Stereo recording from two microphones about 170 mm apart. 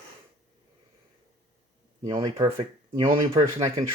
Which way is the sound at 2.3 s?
35° right (ahead or behind).